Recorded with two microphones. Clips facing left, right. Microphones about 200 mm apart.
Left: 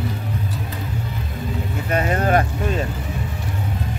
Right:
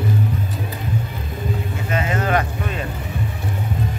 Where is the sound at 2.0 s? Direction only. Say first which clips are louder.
Left 2 dB; 40° left (ahead or behind).